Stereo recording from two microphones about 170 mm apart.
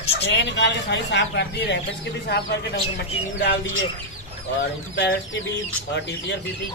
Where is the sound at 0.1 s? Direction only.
90° left.